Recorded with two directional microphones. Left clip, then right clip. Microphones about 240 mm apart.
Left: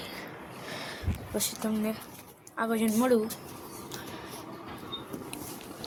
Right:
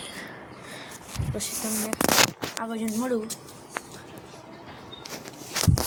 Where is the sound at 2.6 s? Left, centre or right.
Centre.